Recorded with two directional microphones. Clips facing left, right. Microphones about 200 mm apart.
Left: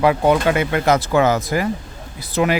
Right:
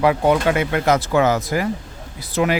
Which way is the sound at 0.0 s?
25° left (ahead or behind).